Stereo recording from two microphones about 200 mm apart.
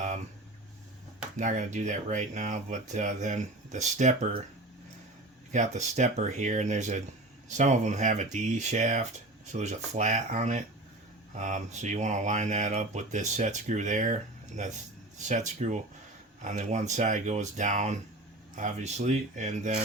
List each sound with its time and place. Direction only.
1.4 s speech: 40° right (ahead or behind)
5.5 s speech: 35° right (ahead or behind)